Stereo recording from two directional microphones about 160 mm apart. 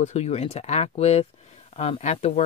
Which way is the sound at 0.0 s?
45° left (ahead or behind).